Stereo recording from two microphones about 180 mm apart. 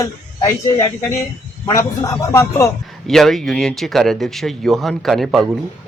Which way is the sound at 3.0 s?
Centre (ahead or behind).